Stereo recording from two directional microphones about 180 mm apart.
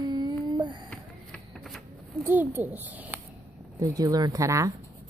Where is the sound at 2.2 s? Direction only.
10° right (ahead or behind).